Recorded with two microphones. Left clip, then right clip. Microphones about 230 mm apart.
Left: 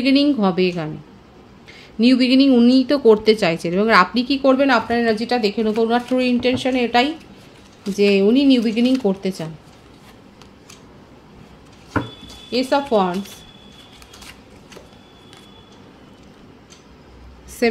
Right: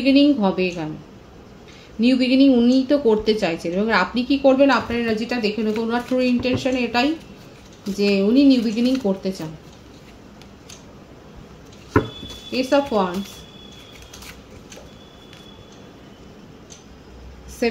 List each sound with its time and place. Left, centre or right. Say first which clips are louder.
0.0 s a woman's voice: even; left
2.0 s a woman's voice: left 2 dB; left
12.4 s a woman's voice: left 1 dB; left